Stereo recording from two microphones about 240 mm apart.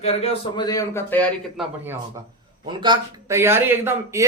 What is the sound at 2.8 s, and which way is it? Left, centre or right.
Speech, centre.